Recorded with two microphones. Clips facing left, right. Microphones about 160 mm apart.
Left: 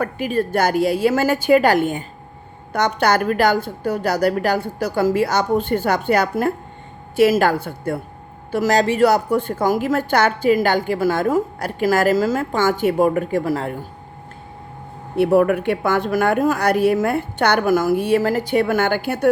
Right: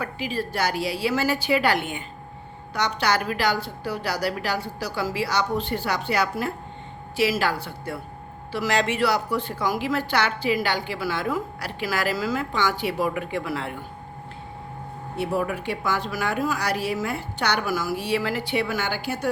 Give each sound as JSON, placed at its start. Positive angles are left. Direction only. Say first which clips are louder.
{"t": 0.0, "sound": "a woman's voice", "louder": "left 8 dB", "side_deg": 50}
{"t": 15.1, "sound": "a woman's voice", "louder": "left 11 dB", "side_deg": 60}